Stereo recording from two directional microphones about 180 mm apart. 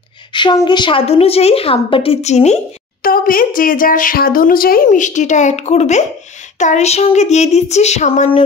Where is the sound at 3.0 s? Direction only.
50° left (ahead or behind).